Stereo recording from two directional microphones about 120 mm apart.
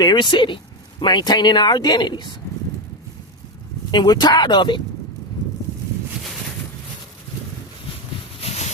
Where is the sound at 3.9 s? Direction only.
35° left (ahead or behind).